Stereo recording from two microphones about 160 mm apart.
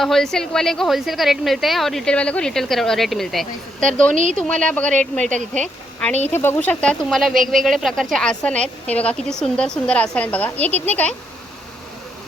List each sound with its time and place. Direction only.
0.0 s a woman's voice: centre (ahead or behind)
4.1 s a woman's voice: 50° right (ahead or behind)
4.4 s a woman's voice: 5° left (ahead or behind)